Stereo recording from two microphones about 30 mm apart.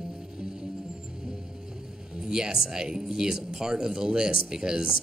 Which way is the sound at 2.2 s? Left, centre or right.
Right.